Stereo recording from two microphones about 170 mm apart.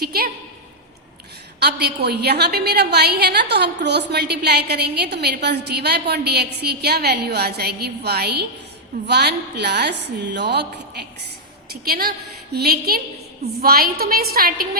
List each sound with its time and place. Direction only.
0.0 s a woman's voice: 65° right (ahead or behind)
1.5 s a woman's voice: 75° right (ahead or behind)
11.7 s a woman's voice: 65° right (ahead or behind)